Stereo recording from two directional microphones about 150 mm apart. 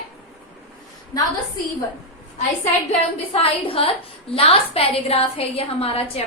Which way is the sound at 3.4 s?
40° left (ahead or behind).